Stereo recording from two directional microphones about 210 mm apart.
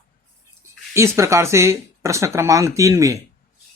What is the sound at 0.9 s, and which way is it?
Speech, 15° right (ahead or behind).